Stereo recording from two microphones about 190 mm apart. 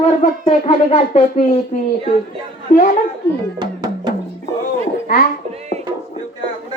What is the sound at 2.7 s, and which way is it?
Speech, 45° left (ahead or behind).